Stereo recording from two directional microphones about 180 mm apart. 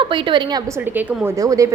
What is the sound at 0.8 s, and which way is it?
Speech, 10° right (ahead or behind).